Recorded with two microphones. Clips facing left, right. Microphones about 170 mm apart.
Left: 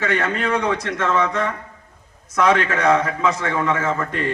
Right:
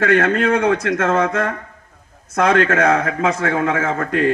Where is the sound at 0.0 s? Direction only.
55° right (ahead or behind).